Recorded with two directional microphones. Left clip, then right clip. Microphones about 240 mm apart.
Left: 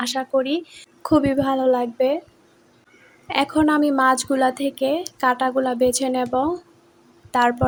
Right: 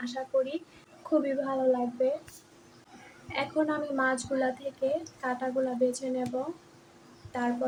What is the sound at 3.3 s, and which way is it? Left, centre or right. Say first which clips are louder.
Speech: left 11 dB; left.